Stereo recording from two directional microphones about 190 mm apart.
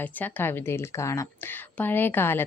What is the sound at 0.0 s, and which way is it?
A woman's voice, 10° left (ahead or behind).